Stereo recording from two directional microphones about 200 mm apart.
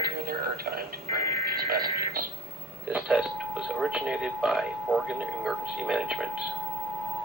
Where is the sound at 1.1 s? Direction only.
50° right (ahead or behind).